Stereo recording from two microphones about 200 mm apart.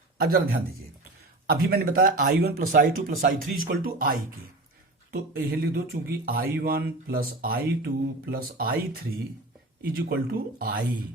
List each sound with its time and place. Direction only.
0.2 s speech: 45° right (ahead or behind)
5.1 s speech: 50° right (ahead or behind)
9.8 s speech: 50° right (ahead or behind)